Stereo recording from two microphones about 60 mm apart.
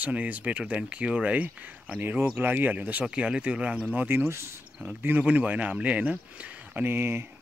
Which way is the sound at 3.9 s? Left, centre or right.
Right.